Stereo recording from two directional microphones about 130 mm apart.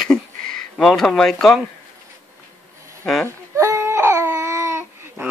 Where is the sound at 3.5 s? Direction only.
20° right (ahead or behind).